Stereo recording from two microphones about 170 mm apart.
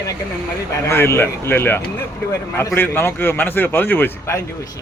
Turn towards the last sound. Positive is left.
turn(degrees=10)  # may be behind; listen again after turning